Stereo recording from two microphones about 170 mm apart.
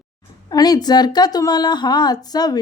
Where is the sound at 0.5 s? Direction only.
25° left (ahead or behind).